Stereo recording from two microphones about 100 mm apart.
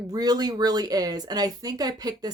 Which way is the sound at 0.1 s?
40° right (ahead or behind).